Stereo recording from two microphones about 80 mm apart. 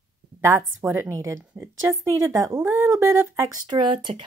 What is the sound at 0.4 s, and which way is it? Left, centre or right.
Speech, right.